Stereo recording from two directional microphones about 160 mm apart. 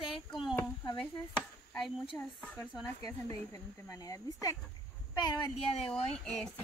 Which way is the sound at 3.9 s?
20° left (ahead or behind).